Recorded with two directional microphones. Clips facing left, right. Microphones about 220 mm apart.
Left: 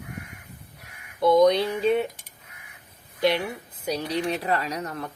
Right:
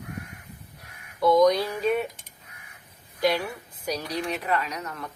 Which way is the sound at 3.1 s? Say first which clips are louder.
Left 1 dB; 25° left (ahead or behind).